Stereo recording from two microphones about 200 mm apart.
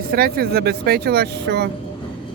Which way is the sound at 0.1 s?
50° right (ahead or behind).